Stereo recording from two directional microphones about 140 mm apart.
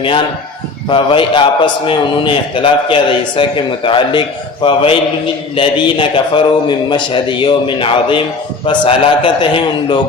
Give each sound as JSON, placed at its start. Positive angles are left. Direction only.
{"t": 0.9, "sound": "a man's voice", "side_deg": 35}